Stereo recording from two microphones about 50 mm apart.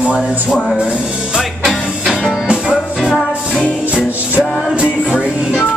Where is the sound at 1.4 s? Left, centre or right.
Centre.